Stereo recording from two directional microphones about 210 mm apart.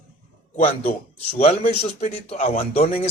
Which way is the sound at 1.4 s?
30° left (ahead or behind).